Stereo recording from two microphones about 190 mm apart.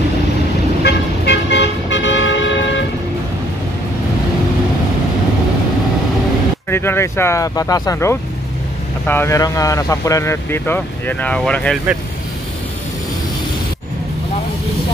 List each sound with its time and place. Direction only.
0.8 s toot: 65° left (ahead or behind)
6.7 s speech: 10° left (ahead or behind)